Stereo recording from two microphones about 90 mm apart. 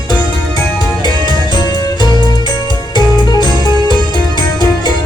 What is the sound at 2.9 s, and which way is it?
Music, 55° left (ahead or behind).